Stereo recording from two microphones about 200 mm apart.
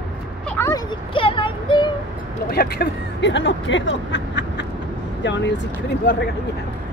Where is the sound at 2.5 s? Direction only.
50° left (ahead or behind).